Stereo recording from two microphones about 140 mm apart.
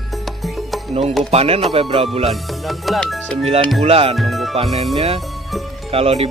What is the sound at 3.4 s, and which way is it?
Music, 45° right (ahead or behind).